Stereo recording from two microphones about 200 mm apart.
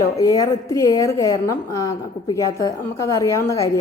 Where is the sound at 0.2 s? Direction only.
15° left (ahead or behind).